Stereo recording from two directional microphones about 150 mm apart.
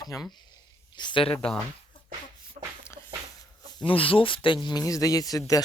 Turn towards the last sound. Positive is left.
turn(degrees=25)  # may be behind; listen again after turning